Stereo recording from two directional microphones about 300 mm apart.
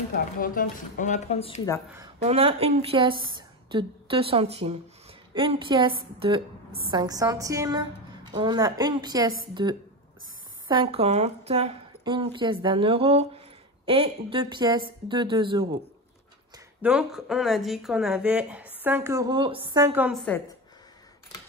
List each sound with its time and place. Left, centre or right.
0.1 s speech: left
2.2 s a woman's voice: centre
16.5 s a woman's voice: centre